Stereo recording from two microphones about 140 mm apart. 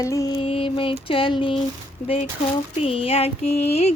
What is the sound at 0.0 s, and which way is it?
Music, 25° left (ahead or behind).